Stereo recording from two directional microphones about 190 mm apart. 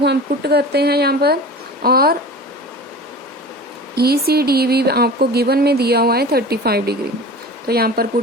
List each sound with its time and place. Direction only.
0.0 s speech: 60° right (ahead or behind)
3.9 s speech: 55° right (ahead or behind)